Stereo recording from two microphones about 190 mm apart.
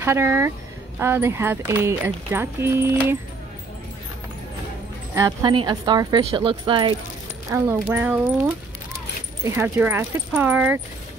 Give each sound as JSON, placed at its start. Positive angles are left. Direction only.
{"t": 0.0, "sound": "speech", "side_deg": -15}
{"t": 5.1, "sound": "speech", "side_deg": -20}
{"t": 7.5, "sound": "speech", "side_deg": -15}